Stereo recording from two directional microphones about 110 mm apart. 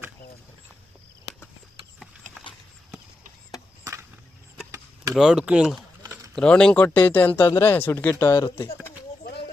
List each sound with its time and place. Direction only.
5.1 s speech: 5° right (ahead or behind)
6.3 s speech: 10° left (ahead or behind); by 8.4 s 25° left (ahead or behind)